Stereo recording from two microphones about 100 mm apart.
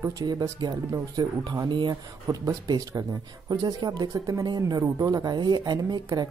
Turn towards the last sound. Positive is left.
turn(degrees=-40)  # may be behind; listen again after turning